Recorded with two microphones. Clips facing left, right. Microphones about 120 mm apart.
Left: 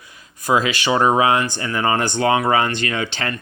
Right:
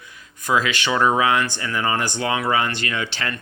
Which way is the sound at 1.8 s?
45° left (ahead or behind).